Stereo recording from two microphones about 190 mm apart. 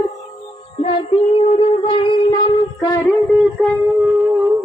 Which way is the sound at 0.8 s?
30° left (ahead or behind).